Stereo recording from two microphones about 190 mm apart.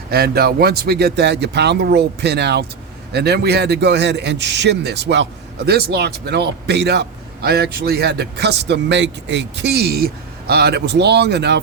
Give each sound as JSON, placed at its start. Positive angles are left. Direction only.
{"t": 0.1, "sound": "a man's voice", "side_deg": -55}